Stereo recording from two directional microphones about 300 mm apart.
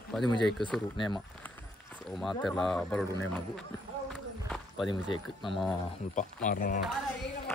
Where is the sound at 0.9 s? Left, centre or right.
Centre.